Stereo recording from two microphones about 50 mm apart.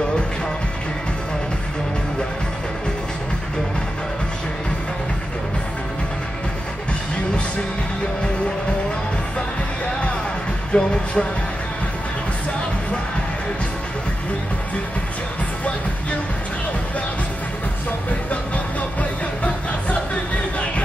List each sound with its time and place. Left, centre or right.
10.7 s music: left
18.3 s music: left